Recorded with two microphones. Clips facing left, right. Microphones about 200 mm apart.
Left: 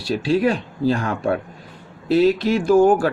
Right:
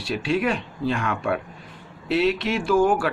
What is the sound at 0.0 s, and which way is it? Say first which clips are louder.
Speech: left 5 dB; 35° left (ahead or behind).